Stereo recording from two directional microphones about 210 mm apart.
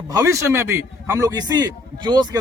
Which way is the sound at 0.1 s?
15° right (ahead or behind).